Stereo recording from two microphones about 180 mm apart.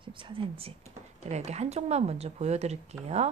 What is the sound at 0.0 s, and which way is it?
Speech, 30° right (ahead or behind).